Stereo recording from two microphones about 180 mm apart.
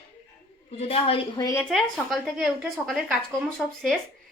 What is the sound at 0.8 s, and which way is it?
Speech, 35° left (ahead or behind).